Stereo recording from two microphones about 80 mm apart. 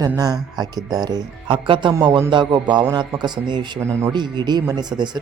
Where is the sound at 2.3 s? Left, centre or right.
Right.